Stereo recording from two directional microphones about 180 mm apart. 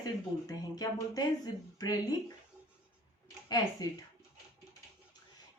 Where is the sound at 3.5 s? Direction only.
20° left (ahead or behind).